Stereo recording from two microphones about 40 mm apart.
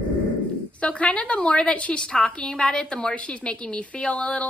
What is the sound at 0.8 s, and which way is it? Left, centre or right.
A woman's voice, left.